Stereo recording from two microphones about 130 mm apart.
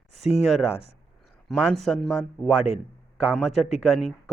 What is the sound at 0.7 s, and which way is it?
Speech, 50° left (ahead or behind).